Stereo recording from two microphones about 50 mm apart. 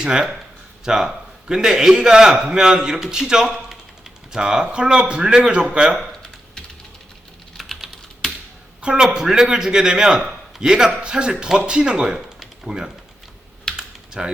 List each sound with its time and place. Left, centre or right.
0.0 s a man's voice: centre
6.2 s typing: centre
7.5 s typing: centre
8.8 s a man's voice: centre
13.7 s typing: centre